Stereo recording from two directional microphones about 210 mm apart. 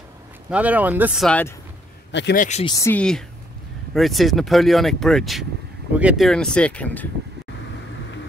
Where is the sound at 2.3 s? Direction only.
35° left (ahead or behind).